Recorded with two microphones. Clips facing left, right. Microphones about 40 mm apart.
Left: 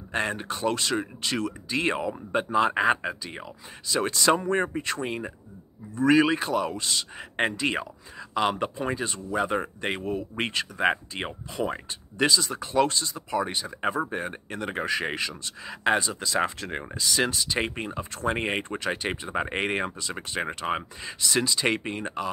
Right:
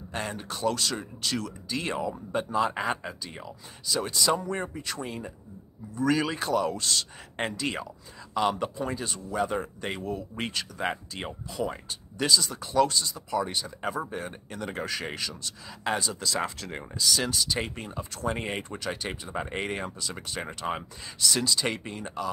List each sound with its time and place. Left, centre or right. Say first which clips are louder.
0.1 s speech: left 6 dB; left
16.0 s speech: left 3 dB; left